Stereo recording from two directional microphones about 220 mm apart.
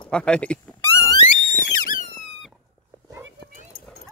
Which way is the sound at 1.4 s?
35° left (ahead or behind).